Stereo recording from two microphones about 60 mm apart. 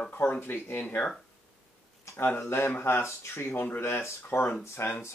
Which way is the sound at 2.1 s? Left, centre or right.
Left.